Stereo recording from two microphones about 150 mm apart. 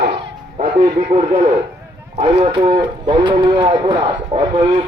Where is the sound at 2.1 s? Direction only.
45° right (ahead or behind).